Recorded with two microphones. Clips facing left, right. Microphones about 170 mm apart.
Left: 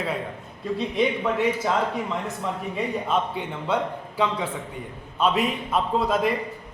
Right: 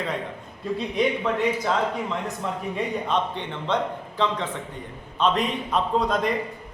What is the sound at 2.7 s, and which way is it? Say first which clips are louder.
A man's voice: even; 5° left (ahead or behind).